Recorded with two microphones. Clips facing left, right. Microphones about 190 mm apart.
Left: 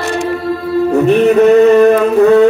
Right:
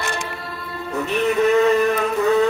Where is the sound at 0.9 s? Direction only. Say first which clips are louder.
Left 11 dB; 70° left (ahead or behind).